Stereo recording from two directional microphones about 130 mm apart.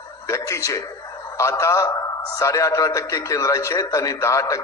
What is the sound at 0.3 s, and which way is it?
A man's voice, 25° left (ahead or behind).